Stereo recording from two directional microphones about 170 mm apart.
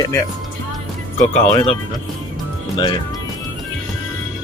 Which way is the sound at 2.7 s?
25° left (ahead or behind).